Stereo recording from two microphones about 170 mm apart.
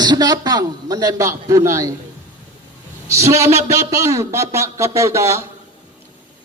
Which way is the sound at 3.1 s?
15° right (ahead or behind).